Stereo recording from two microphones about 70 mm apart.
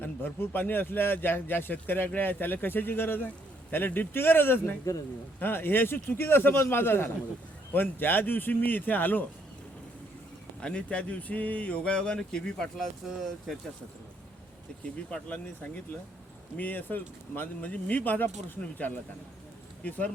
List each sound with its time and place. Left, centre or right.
0.0 s a man's voice: left
10.6 s speech: centre
15.1 s a man's voice: centre